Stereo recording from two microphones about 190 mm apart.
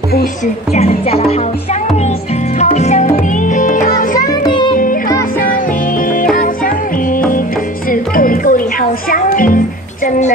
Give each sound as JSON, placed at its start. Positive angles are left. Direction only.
{"t": 0.7, "sound": "speech", "side_deg": 30}
{"t": 2.6, "sound": "music", "side_deg": 35}
{"t": 4.4, "sound": "music", "side_deg": 25}
{"t": 6.3, "sound": "music", "side_deg": 45}